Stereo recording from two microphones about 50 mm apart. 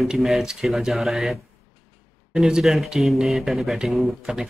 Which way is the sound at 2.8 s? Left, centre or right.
Centre.